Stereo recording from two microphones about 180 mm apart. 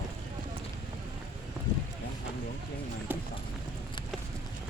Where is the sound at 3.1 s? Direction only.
10° right (ahead or behind).